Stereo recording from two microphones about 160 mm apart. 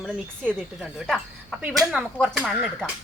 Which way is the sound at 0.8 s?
Centre (ahead or behind).